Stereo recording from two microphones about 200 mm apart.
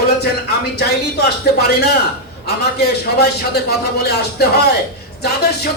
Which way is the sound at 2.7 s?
55° left (ahead or behind).